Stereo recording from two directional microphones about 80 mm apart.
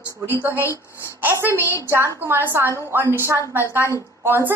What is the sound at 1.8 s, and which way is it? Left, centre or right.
A woman's voice, right.